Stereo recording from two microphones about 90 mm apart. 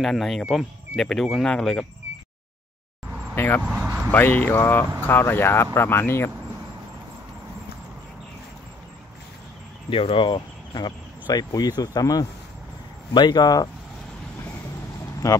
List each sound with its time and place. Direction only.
0.0 s speech: centre (ahead or behind)
1.5 s insect: 10° left (ahead or behind)
3.3 s speech: 25° left (ahead or behind)
3.6 s a sound: 15° right (ahead or behind)
4.1 s speech: 20° left (ahead or behind)
9.8 s speech: 80° left; by 12.3 s 45° left (ahead or behind)
13.1 s speech: 55° left (ahead or behind)
15.2 s speech: 40° left (ahead or behind)